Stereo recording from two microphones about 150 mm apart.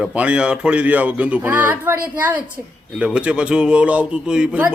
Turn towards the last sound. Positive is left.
turn(degrees=-10)  # may be behind; listen again after turning